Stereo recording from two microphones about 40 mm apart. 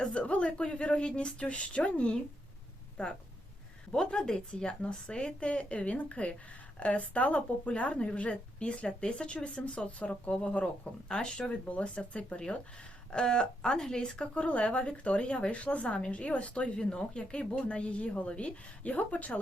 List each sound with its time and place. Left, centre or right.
0.1 s a sound: left
0.4 s a woman's voice: left
3.9 s a woman's voice: centre; by 10.7 s left
11.1 s a woman's voice: centre
11.7 s speech: left
13.1 s speech: centre
14.4 s a woman's voice: left